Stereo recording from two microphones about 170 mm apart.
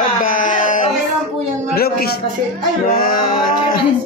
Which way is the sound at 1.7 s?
65° left (ahead or behind).